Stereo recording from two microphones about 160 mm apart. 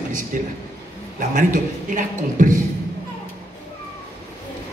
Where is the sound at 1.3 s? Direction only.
55° right (ahead or behind).